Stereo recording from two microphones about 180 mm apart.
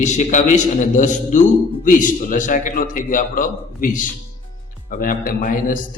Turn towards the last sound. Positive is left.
turn(degrees=50)  # may be behind; listen again after turning